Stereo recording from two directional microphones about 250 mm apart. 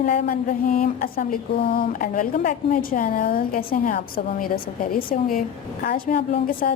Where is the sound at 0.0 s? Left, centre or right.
Left.